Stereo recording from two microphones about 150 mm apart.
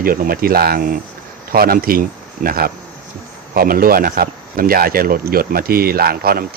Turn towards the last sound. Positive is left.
turn(degrees=-85)